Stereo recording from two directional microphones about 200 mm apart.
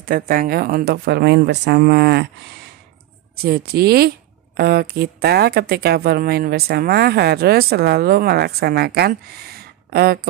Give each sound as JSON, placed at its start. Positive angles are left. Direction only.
{"t": 0.0, "sound": "speech", "side_deg": -45}
{"t": 3.3, "sound": "speech", "side_deg": -50}